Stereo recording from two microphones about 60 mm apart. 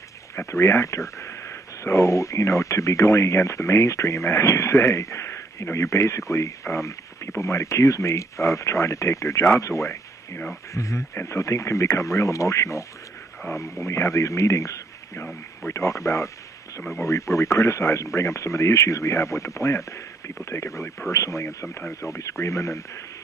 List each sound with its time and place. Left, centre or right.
0.5 s speech: left
13.6 s a man's voice: left